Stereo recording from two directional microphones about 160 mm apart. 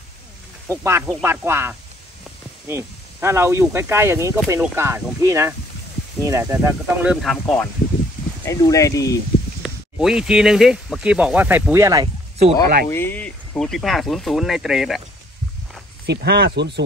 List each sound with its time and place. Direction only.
0.7 s speech: 15° right (ahead or behind); by 7.6 s 5° left (ahead or behind)
8.5 s speech: 20° left (ahead or behind)
9.6 s speech: 5° right (ahead or behind); by 12.1 s 20° right (ahead or behind)
12.5 s speech: 15° left (ahead or behind); by 15.0 s centre (ahead or behind)
16.1 s speech: 90° right